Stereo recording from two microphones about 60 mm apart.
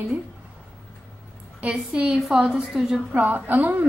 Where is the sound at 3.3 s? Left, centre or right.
Right.